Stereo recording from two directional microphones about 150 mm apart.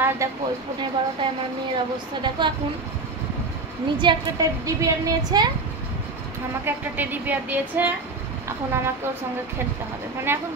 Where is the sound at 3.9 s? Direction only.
30° right (ahead or behind).